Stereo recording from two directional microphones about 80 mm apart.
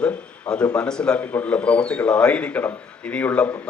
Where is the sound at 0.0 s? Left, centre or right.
Centre.